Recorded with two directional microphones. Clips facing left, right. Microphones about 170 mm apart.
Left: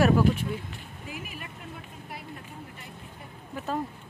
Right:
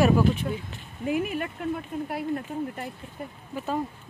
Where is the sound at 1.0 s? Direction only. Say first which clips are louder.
Right 15 dB; 60° right (ahead or behind).